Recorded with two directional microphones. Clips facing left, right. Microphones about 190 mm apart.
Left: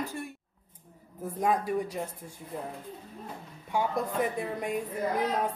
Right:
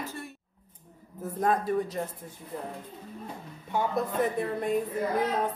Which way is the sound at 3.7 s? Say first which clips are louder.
Right 1 dB; 10° left (ahead or behind).